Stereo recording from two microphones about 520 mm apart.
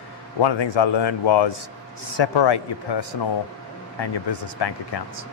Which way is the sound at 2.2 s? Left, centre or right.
Left.